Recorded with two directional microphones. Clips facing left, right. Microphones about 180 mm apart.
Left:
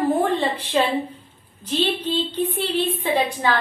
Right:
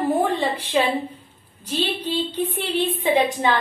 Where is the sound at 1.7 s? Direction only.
10° right (ahead or behind).